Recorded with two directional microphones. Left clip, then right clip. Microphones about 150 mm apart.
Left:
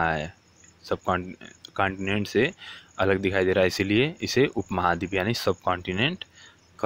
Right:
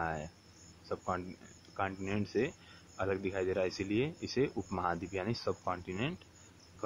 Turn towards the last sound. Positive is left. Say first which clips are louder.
# left 13 dB
turn(degrees=35)  # may be behind; listen again after turning